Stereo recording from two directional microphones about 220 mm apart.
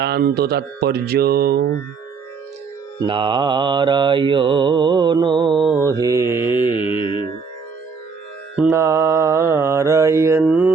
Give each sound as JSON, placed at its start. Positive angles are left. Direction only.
{"t": 0.0, "sound": "speech", "side_deg": -45}
{"t": 3.1, "sound": "mantra", "side_deg": -20}
{"t": 6.6, "sound": "music", "side_deg": 20}
{"t": 8.7, "sound": "mantra", "side_deg": -15}